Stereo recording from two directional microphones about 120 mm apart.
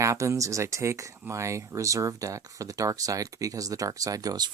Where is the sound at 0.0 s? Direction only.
25° right (ahead or behind).